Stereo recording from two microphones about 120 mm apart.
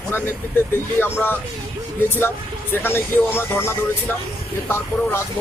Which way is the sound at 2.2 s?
20° left (ahead or behind).